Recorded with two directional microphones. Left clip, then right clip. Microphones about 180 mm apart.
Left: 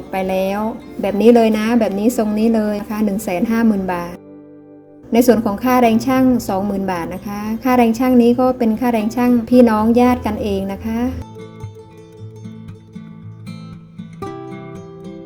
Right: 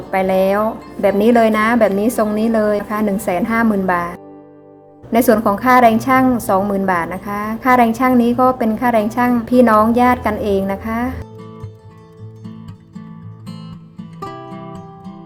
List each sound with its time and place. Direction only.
0.1 s a woman's voice: 35° left (ahead or behind)